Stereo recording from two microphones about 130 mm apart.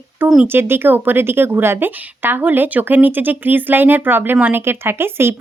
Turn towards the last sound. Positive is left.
turn(degrees=-20)  # may be behind; listen again after turning